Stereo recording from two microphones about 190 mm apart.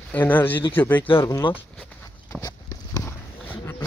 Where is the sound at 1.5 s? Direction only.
5° left (ahead or behind).